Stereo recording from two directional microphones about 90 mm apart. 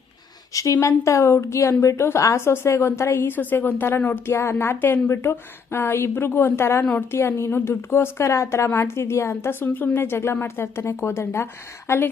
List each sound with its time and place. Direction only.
0.5 s a woman's voice: 35° left (ahead or behind)